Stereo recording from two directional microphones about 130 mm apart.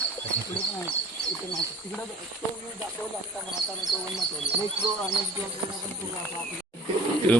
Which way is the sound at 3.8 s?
30° right (ahead or behind).